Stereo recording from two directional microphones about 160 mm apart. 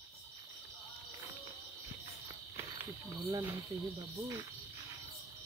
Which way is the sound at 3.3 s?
15° right (ahead or behind).